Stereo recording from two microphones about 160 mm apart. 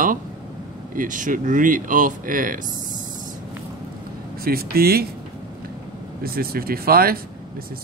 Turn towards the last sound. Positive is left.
turn(degrees=-70)  # may be behind; listen again after turning